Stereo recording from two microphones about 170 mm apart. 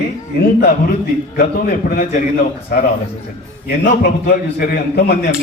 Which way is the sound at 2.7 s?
60° left (ahead or behind).